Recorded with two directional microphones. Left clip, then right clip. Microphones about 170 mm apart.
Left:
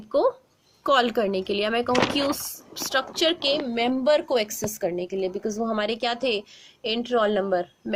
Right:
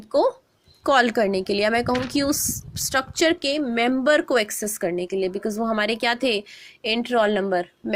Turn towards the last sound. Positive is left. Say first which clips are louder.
# right 1 dB
turn(degrees=-20)  # may be behind; listen again after turning